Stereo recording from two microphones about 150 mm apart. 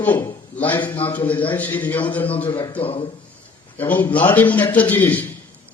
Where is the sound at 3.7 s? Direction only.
10° left (ahead or behind).